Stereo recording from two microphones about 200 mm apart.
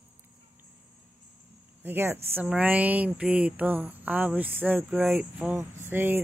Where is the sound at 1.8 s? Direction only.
10° right (ahead or behind).